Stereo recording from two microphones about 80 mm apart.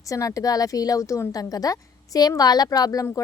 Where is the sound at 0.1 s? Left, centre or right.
Left.